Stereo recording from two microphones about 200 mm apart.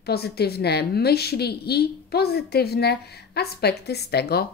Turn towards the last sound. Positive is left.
turn(degrees=50)  # may be behind; listen again after turning